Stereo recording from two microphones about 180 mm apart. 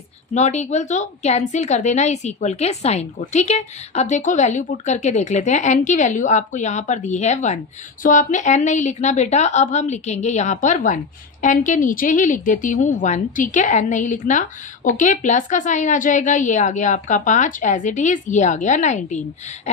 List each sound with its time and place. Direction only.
0.3 s a woman's voice: 40° left (ahead or behind)